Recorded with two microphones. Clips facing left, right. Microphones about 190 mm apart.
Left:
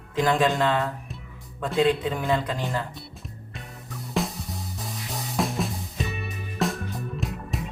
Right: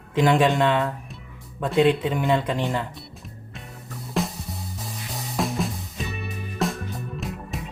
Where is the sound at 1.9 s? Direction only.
25° right (ahead or behind).